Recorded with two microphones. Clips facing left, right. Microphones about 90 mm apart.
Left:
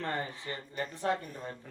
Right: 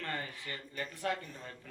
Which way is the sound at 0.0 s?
30° left (ahead or behind).